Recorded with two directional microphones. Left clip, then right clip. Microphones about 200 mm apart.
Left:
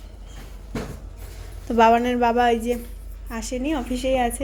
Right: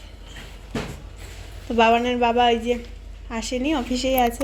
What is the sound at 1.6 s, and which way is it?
A woman's voice, 15° left (ahead or behind).